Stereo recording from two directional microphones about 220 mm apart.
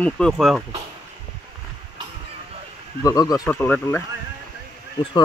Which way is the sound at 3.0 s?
15° left (ahead or behind).